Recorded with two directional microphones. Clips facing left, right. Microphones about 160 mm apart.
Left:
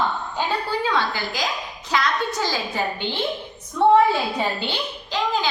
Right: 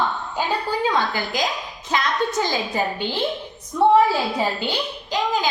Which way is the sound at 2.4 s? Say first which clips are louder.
Right 2 dB; 20° right (ahead or behind).